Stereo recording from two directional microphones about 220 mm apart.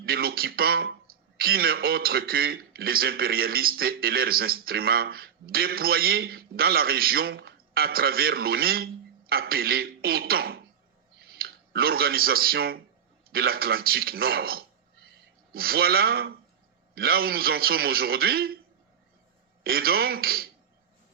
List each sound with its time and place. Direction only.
0.0 s a man's voice: 45° right (ahead or behind)
19.6 s a man's voice: 45° right (ahead or behind)